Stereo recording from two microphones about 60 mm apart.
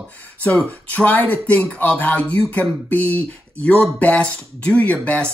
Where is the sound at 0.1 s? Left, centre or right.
Left.